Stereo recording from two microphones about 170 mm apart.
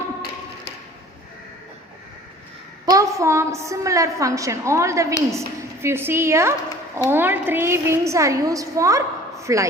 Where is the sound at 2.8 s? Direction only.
20° right (ahead or behind).